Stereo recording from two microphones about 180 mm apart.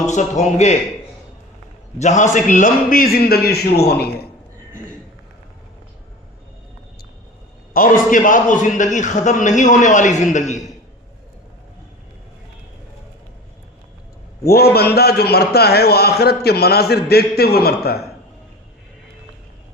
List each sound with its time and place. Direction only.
0.1 s a man's voice: 40° left (ahead or behind)
2.0 s a man's voice: 40° left (ahead or behind); by 4.3 s 60° left (ahead or behind)
7.7 s a man's voice: 50° left (ahead or behind)
14.4 s a man's voice: 60° left (ahead or behind)